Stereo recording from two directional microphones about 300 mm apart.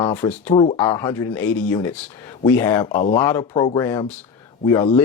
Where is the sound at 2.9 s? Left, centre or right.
Left.